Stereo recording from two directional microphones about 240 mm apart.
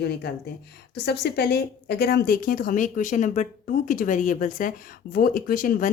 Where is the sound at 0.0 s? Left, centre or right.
Left.